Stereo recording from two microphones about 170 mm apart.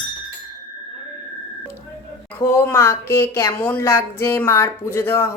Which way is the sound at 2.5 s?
15° left (ahead or behind).